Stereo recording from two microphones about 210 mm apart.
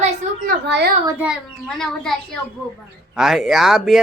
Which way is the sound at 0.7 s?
55° right (ahead or behind).